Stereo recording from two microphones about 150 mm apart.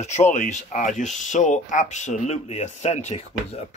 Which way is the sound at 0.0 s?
50° left (ahead or behind).